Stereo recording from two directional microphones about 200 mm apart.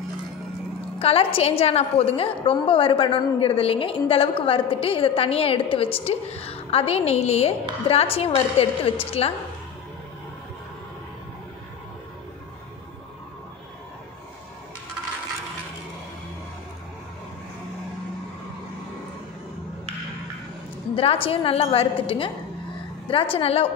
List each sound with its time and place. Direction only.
0.9 s a woman's voice: 30° left (ahead or behind)
20.9 s a woman's voice: 30° left (ahead or behind)